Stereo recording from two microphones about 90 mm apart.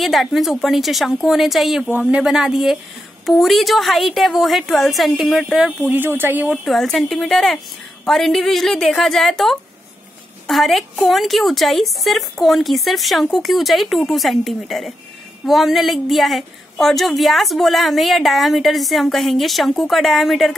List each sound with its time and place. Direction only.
0.0 s speech: centre (ahead or behind)
1.9 s speech: 15° right (ahead or behind)
5.9 s speech: 20° right (ahead or behind)
6.5 s speech: centre (ahead or behind)